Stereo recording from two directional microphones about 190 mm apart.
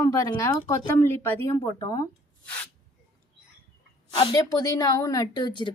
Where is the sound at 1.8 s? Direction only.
20° left (ahead or behind).